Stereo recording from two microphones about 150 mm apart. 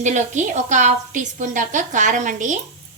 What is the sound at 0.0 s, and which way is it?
A woman's voice, 55° right (ahead or behind).